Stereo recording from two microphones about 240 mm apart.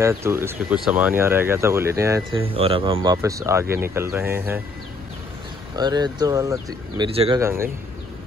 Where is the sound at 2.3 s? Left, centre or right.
Right.